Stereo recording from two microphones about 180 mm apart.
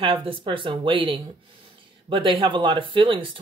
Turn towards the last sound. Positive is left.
turn(degrees=-25)  # may be behind; listen again after turning